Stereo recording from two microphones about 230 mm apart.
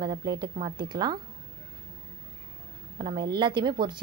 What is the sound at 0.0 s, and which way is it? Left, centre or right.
A woman's voice, centre.